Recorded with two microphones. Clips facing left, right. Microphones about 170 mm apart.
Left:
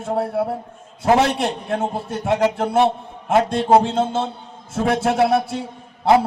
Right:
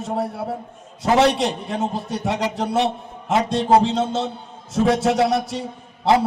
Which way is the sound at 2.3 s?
60° left (ahead or behind).